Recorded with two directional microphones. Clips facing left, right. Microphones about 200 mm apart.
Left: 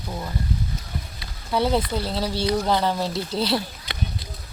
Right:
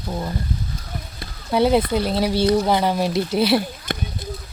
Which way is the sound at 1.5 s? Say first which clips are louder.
Right 5 dB; 15° right (ahead or behind).